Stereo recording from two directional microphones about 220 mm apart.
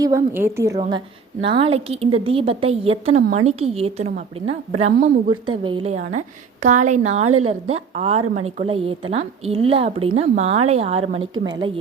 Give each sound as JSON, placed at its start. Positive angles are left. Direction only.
{"t": 0.0, "sound": "a woman's voice", "side_deg": -10}
{"t": 3.2, "sound": "a woman's voice", "side_deg": -40}
{"t": 3.6, "sound": "a woman's voice", "side_deg": -25}
{"t": 5.5, "sound": "a woman's voice", "side_deg": -20}